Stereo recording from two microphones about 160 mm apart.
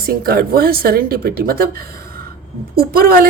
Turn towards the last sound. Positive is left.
turn(degrees=-65)  # may be behind; listen again after turning